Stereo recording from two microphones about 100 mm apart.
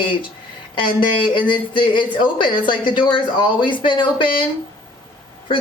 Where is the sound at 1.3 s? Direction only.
55° left (ahead or behind).